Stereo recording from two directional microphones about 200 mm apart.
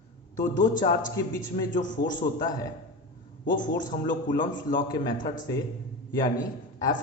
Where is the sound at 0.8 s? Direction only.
40° left (ahead or behind).